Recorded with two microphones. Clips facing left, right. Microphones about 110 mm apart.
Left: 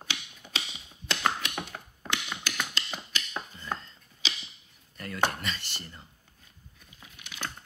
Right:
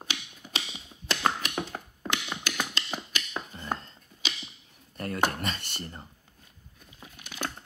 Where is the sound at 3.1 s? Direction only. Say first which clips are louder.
Right 1 dB; 50° right (ahead or behind).